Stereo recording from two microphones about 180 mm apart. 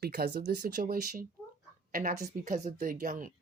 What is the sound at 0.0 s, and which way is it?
A woman's voice, 60° right (ahead or behind).